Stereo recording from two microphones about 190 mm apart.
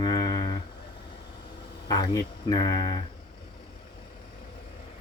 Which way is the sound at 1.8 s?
20° left (ahead or behind).